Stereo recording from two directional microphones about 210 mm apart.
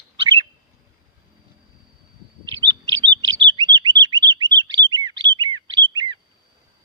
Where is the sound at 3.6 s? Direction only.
20° right (ahead or behind).